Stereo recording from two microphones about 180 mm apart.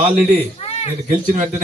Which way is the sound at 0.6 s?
35° left (ahead or behind).